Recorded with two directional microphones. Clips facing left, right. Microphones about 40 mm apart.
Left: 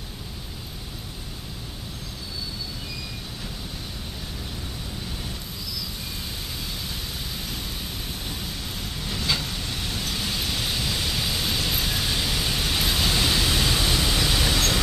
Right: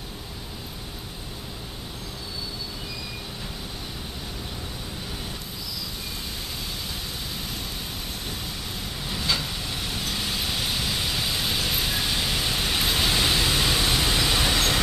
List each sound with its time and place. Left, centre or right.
9.0 s vehicle: centre
12.8 s pink noise: centre
13.7 s vehicle: centre
14.1 s train: centre